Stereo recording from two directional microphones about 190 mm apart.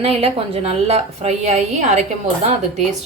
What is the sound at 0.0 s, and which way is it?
A woman's voice, 30° right (ahead or behind).